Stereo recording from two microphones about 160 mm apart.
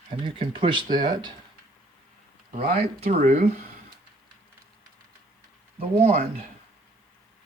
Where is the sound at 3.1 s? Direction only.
45° right (ahead or behind).